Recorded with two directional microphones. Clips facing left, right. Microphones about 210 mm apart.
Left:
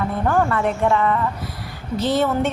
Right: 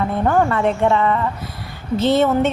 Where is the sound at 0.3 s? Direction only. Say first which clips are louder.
Right 2 dB; 25° right (ahead or behind).